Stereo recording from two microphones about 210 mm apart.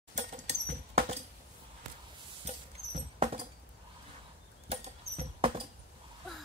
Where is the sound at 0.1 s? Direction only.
55° right (ahead or behind).